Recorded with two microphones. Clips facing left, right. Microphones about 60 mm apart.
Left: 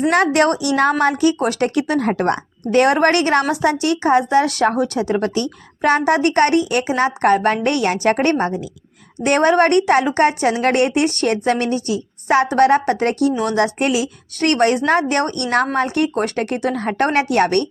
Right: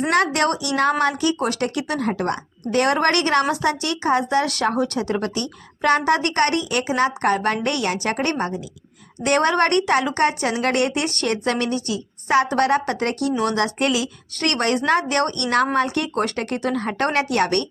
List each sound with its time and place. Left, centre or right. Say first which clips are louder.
0.1 s speech: left 3 dB; left
2.8 s speech: left 3 dB; left